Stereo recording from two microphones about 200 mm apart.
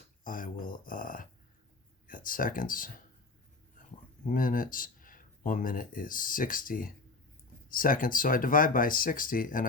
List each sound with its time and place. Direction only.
0.3 s speech: 45° left (ahead or behind)
4.3 s speech: 45° left (ahead or behind)